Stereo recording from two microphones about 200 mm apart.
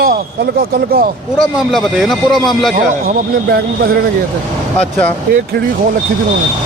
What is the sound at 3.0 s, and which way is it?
Speech, 50° right (ahead or behind).